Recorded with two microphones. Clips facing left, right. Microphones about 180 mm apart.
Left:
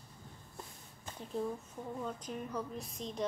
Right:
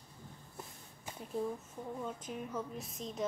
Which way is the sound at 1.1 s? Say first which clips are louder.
Even; 5° right (ahead or behind).